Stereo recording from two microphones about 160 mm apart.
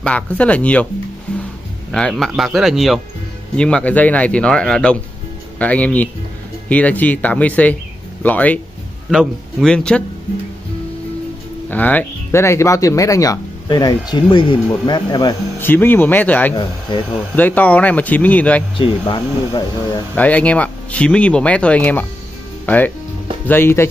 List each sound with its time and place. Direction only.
0.0 s speech: 10° left (ahead or behind)
1.9 s speech: 5° left (ahead or behind)
11.7 s speech: 10° left (ahead or behind); by 15.3 s 25° left (ahead or behind)
15.6 s speech: 10° left (ahead or behind)
16.9 s speech: 30° left (ahead or behind)
17.4 s speech: 10° left (ahead or behind)
18.8 s speech: 30° left (ahead or behind)
20.2 s speech: 10° left (ahead or behind)